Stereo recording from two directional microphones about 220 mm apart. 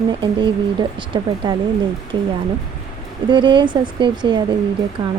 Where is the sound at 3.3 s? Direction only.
20° right (ahead or behind).